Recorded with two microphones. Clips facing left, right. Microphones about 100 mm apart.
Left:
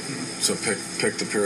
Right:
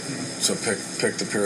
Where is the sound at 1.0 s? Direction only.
50° left (ahead or behind).